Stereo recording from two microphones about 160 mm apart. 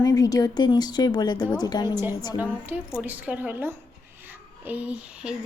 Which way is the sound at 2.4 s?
10° right (ahead or behind).